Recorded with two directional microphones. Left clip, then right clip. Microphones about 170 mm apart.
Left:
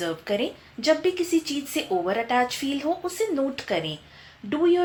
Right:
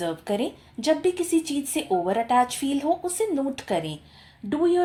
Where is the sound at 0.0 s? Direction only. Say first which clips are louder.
Even; 50° right (ahead or behind).